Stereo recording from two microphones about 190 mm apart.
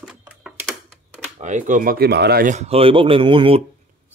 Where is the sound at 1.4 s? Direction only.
40° right (ahead or behind).